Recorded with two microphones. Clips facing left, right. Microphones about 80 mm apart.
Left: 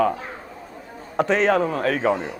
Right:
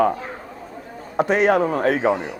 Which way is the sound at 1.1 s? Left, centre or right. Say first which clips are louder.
Right 2 dB; centre.